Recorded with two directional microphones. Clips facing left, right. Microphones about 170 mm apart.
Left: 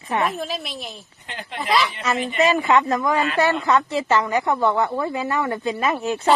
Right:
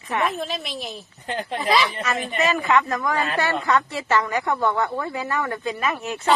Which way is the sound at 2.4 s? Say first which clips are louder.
Left 3 dB; 30° left (ahead or behind).